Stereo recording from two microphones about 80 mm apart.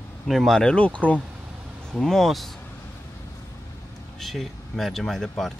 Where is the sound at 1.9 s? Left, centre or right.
Centre.